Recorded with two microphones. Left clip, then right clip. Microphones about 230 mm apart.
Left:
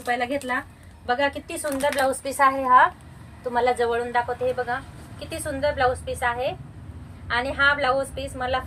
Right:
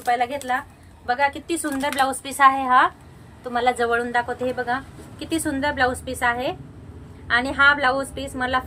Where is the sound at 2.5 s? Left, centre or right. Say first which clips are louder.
Left 1 dB; centre.